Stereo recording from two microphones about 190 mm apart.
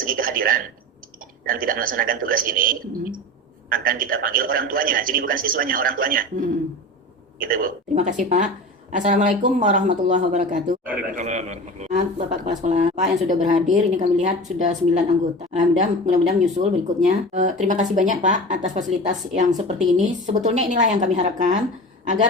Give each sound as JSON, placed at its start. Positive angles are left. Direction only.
{"t": 0.0, "sound": "a man's voice", "side_deg": -45}